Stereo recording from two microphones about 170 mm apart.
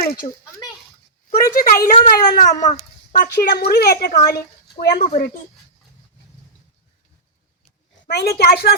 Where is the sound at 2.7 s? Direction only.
50° left (ahead or behind).